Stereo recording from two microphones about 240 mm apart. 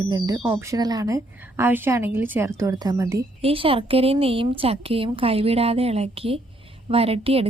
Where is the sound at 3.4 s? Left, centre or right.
Right.